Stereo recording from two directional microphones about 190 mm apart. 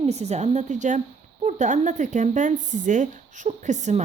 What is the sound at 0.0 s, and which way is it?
Speech, 35° right (ahead or behind).